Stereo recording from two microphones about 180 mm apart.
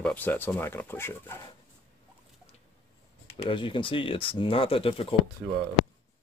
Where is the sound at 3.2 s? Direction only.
30° left (ahead or behind).